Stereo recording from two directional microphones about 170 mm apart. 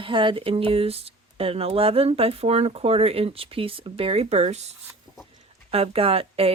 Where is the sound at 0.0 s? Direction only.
30° right (ahead or behind).